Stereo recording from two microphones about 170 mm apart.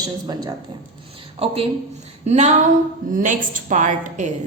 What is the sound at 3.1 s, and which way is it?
A woman's voice, 50° right (ahead or behind).